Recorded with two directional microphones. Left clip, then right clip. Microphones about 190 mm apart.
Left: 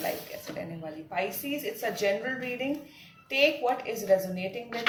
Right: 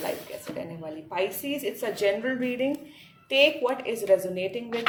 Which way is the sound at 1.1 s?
45° right (ahead or behind).